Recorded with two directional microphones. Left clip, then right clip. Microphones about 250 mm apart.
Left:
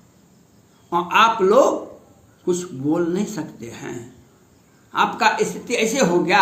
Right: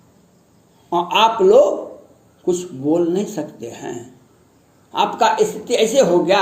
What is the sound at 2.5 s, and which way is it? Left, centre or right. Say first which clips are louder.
Speech: right 3 dB; centre.